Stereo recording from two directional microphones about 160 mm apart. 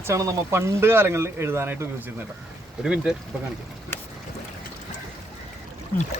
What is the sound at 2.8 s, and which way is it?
Speech, 5° right (ahead or behind).